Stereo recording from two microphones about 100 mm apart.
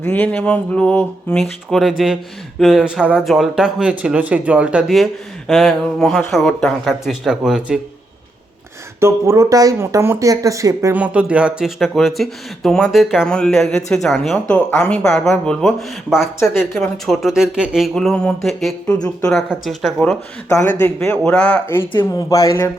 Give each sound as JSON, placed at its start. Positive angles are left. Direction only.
{"t": 0.0, "sound": "speech", "side_deg": 15}
{"t": 5.5, "sound": "speech", "side_deg": 0}
{"t": 9.0, "sound": "speech", "side_deg": -30}
{"t": 10.9, "sound": "speech", "side_deg": -15}
{"t": 13.2, "sound": "speech", "side_deg": 5}
{"t": 17.9, "sound": "speech", "side_deg": 10}
{"t": 19.4, "sound": "speech", "side_deg": 0}
{"t": 20.5, "sound": "a man's voice", "side_deg": 25}
{"t": 21.0, "sound": "speech", "side_deg": 10}
{"t": 21.8, "sound": "speech", "side_deg": 25}